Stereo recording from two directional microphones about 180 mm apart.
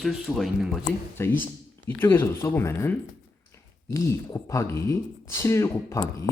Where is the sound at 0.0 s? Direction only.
Centre (ahead or behind).